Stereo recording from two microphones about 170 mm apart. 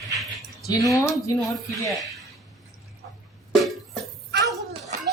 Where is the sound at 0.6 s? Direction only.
20° left (ahead or behind).